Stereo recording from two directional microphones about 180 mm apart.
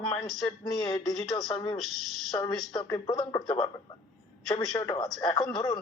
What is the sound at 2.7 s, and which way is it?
Speech, 20° left (ahead or behind).